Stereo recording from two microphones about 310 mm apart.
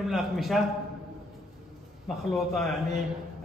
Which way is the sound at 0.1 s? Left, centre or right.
Centre.